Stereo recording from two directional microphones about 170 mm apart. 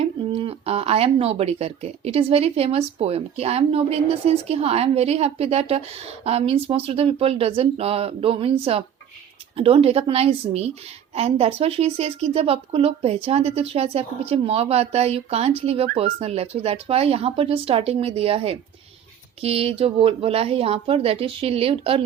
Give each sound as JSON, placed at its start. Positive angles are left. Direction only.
{"t": 0.0, "sound": "speech", "side_deg": -35}